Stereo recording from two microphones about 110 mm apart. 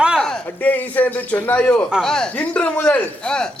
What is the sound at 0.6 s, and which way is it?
Speech, 15° left (ahead or behind).